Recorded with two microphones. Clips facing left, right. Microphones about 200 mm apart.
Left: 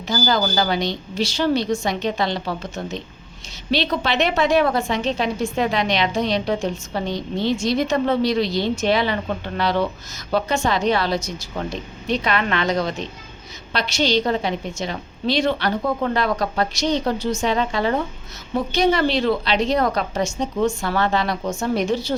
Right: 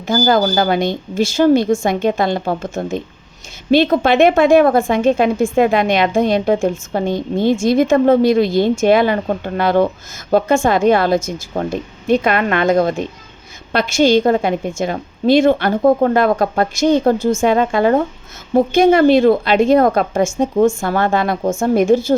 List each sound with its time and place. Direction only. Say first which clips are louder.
0.1 s a woman's voice: right 7 dB; 50° right (ahead or behind)